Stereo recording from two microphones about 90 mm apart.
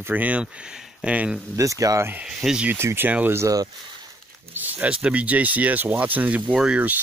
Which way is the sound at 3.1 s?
15° right (ahead or behind).